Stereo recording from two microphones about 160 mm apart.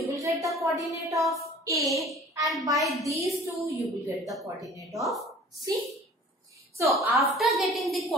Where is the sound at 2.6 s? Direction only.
20° right (ahead or behind).